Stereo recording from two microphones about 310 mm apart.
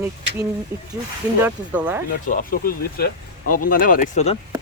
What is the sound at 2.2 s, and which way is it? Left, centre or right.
Speech, left.